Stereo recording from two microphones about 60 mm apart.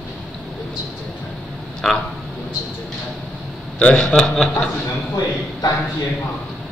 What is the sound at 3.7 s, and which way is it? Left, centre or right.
Speech, centre.